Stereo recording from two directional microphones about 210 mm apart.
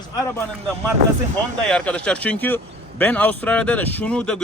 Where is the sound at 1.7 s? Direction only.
5° left (ahead or behind).